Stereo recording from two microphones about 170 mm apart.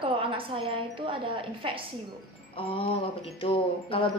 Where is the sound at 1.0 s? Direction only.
30° right (ahead or behind).